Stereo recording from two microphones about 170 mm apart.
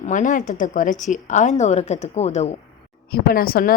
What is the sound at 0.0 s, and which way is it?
A woman's voice, 50° left (ahead or behind).